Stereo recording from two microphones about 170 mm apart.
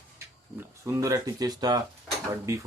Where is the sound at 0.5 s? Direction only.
15° right (ahead or behind).